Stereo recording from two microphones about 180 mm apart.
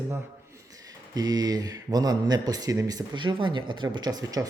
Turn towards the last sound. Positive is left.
turn(degrees=-20)  # may be behind; listen again after turning